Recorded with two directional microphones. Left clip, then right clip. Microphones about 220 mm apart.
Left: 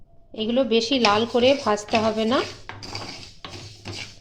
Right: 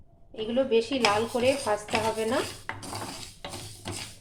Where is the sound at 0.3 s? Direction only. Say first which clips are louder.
Left 4 dB; 40° left (ahead or behind).